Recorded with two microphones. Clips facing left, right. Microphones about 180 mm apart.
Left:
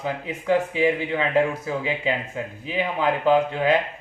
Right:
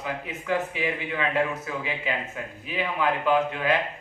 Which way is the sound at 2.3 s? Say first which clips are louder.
Left 5 dB; 25° left (ahead or behind).